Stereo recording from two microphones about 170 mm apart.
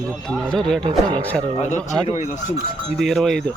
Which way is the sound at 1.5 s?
45° left (ahead or behind).